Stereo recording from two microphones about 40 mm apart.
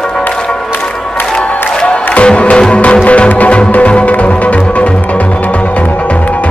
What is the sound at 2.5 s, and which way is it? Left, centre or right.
Music, left.